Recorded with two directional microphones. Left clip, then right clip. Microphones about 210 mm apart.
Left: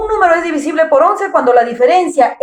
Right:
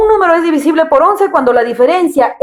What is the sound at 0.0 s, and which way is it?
A woman's voice, 50° right (ahead or behind).